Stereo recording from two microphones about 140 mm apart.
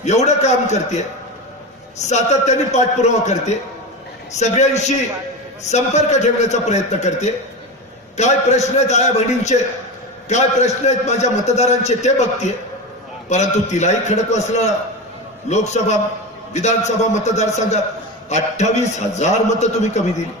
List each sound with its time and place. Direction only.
0.0 s a man's voice: 55° left (ahead or behind)